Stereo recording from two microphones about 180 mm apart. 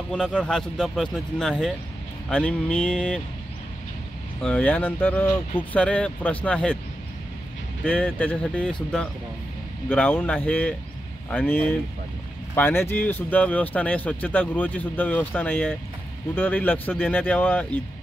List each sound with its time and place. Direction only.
0.1 s speech: 5° left (ahead or behind)
4.4 s speech: 5° left (ahead or behind)
7.8 s speech: 5° left (ahead or behind)
9.8 s speech: 10° left (ahead or behind)